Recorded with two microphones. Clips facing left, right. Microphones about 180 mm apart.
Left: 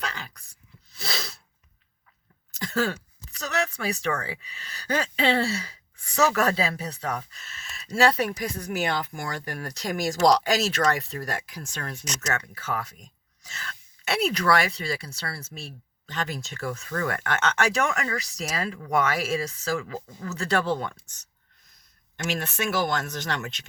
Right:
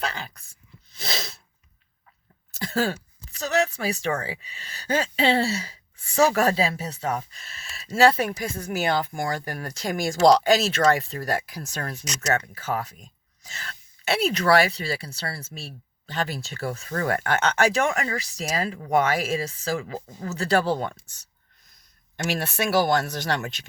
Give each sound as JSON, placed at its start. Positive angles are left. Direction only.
{"t": 0.0, "sound": "a sound", "side_deg": -30}
{"t": 0.9, "sound": "sneeze", "side_deg": -20}
{"t": 2.6, "sound": "speech", "side_deg": -30}
{"t": 22.5, "sound": "speech", "side_deg": -35}